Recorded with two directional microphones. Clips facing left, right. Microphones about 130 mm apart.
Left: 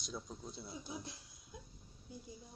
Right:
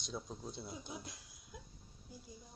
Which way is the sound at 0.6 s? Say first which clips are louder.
Left 1 dB; 25° right (ahead or behind).